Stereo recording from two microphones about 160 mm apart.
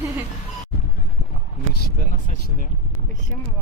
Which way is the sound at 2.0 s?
55° left (ahead or behind).